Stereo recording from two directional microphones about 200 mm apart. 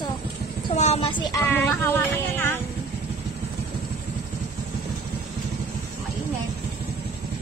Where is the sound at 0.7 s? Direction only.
35° left (ahead or behind).